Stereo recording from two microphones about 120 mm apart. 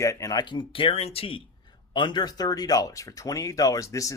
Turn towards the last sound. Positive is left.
turn(degrees=25)  # may be behind; listen again after turning